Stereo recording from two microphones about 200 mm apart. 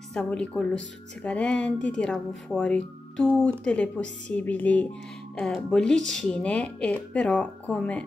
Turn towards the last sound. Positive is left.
turn(degrees=5)  # may be behind; listen again after turning